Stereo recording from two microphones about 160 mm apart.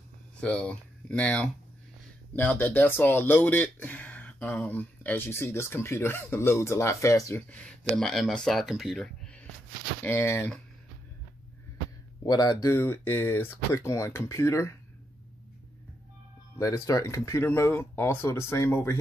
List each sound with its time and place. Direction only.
0.4 s speech: 5° left (ahead or behind)
7.5 s speech: 5° left (ahead or behind)
10.0 s speech: 15° left (ahead or behind)
12.2 s speech: 25° left (ahead or behind)
16.5 s speech: 20° left (ahead or behind)